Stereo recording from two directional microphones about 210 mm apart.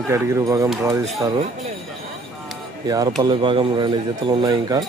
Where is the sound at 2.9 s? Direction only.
20° right (ahead or behind).